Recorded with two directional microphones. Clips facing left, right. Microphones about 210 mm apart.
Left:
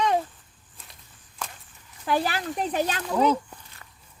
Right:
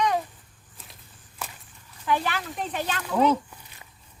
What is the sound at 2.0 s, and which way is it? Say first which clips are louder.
Speech: left 1 dB; 35° left (ahead or behind).